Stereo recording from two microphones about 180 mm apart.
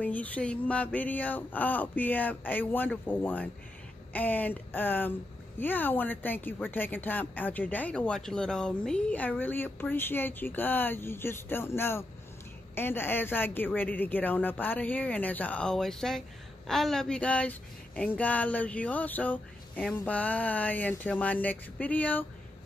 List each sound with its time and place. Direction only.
0.0 s speech: 10° left (ahead or behind)